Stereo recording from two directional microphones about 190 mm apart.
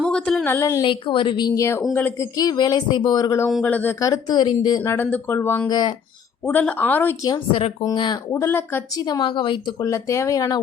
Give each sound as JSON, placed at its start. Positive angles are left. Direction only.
{"t": 0.0, "sound": "a woman's voice", "side_deg": 5}
{"t": 4.8, "sound": "speech", "side_deg": 10}
{"t": 6.4, "sound": "a woman's voice", "side_deg": 10}
{"t": 8.3, "sound": "speech", "side_deg": 10}
{"t": 9.0, "sound": "a woman's voice", "side_deg": 25}